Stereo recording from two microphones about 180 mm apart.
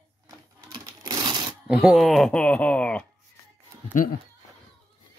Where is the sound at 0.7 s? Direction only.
25° right (ahead or behind).